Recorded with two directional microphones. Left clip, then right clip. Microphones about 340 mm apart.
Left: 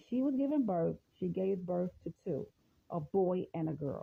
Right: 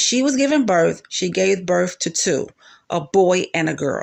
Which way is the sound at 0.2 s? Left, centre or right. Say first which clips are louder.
Right 16 dB; left.